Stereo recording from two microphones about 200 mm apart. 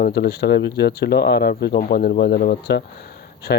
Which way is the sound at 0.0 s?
55° left (ahead or behind).